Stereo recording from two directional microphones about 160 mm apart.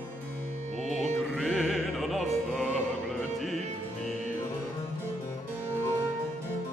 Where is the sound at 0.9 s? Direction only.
45° right (ahead or behind).